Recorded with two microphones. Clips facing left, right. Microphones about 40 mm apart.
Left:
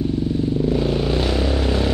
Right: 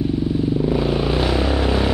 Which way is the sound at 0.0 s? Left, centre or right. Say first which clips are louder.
Right 1 dB; centre.